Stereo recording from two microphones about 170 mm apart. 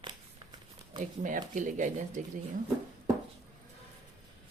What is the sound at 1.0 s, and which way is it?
Speech, 50° right (ahead or behind).